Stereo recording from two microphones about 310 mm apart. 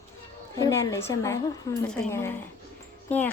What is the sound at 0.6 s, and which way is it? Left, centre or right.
Speech, centre.